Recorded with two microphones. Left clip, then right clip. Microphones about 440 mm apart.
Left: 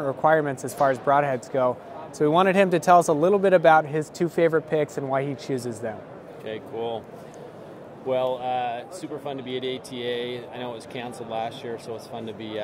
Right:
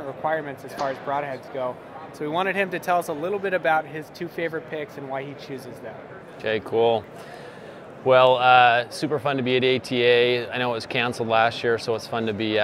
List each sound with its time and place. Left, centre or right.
0.2 s speech: left
6.4 s speech: right
8.1 s speech: right